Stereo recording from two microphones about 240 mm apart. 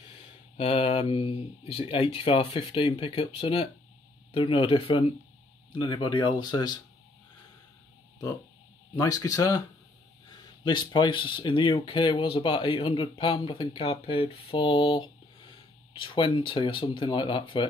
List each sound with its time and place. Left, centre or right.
0.6 s speech: left
8.9 s speech: centre